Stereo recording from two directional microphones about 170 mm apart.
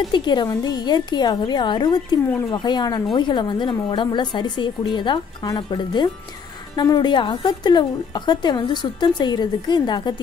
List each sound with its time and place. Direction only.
0.1 s a woman's voice: 25° left (ahead or behind)